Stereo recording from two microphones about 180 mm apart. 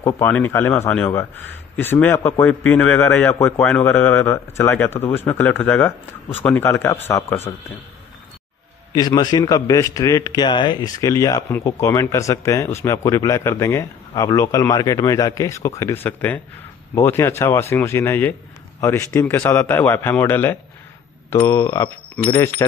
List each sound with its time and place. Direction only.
0.0 s a man's voice: 10° left (ahead or behind)
8.9 s a man's voice: 20° left (ahead or behind)